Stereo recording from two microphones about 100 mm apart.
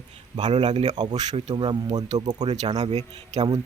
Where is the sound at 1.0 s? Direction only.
45° right (ahead or behind).